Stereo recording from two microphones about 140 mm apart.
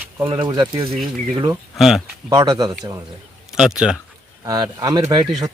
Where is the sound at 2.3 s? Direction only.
25° right (ahead or behind).